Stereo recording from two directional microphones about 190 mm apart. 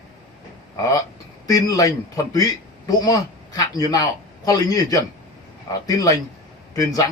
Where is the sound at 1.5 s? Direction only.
20° left (ahead or behind).